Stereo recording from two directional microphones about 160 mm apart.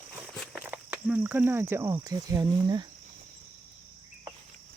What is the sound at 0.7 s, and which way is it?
Speech, 10° right (ahead or behind).